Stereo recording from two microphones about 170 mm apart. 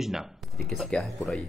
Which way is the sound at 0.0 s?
Centre (ahead or behind).